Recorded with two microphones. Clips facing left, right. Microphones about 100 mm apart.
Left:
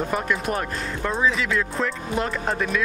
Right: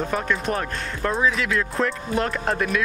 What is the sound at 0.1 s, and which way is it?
Speech, 5° left (ahead or behind).